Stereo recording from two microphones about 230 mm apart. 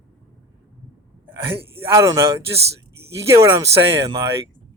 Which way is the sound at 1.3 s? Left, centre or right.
Centre.